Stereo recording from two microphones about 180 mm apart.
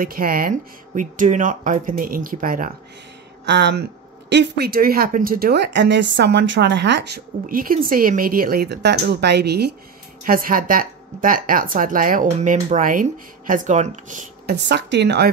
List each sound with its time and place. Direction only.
0.0 s speech: 55° right (ahead or behind)
3.4 s speech: 75° right (ahead or behind)
7.4 s speech: 50° right (ahead or behind)
10.2 s speech: 50° right (ahead or behind)
14.5 s speech: 75° right (ahead or behind)